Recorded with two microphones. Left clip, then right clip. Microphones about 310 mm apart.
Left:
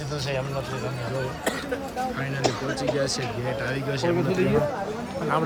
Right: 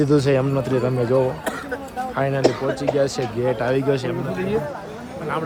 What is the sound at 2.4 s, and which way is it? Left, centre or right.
Speech, right.